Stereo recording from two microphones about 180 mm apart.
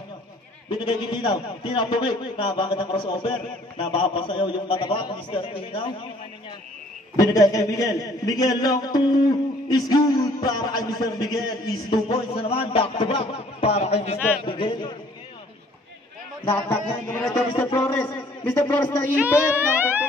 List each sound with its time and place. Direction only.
0.7 s a man's voice: 25° left (ahead or behind)
7.2 s a man's voice: 20° left (ahead or behind)
16.5 s a man's voice: 10° left (ahead or behind)
19.0 s a sound: 10° right (ahead or behind)